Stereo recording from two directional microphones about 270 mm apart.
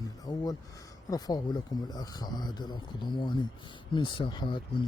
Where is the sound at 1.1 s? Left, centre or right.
Centre.